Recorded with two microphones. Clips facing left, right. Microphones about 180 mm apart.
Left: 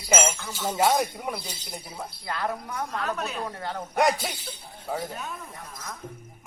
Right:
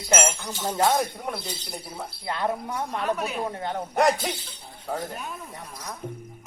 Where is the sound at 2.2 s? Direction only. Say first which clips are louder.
Right 3 dB; 25° right (ahead or behind).